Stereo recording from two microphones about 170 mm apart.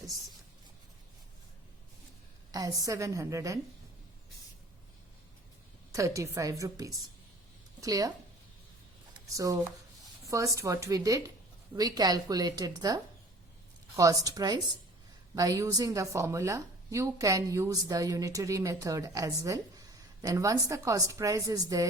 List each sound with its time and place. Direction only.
2.5 s a woman's voice: 20° right (ahead or behind)
5.9 s a woman's voice: 20° right (ahead or behind)
9.3 s a woman's voice: 20° right (ahead or behind)